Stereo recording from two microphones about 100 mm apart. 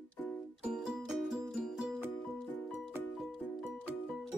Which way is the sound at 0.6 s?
5° right (ahead or behind).